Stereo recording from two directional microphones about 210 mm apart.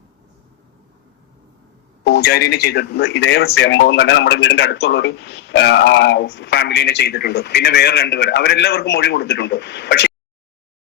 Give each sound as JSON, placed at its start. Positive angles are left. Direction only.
{"t": 2.0, "sound": "speech", "side_deg": 50}